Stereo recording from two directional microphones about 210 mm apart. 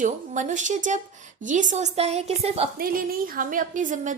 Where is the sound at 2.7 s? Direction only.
45° right (ahead or behind).